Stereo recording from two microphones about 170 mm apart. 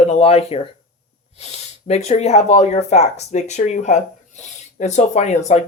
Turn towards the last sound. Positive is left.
turn(degrees=40)  # may be behind; listen again after turning